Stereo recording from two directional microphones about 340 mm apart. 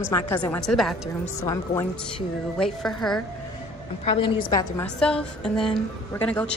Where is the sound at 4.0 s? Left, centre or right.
Centre.